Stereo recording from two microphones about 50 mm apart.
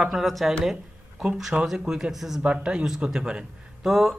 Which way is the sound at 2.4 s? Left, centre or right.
Centre.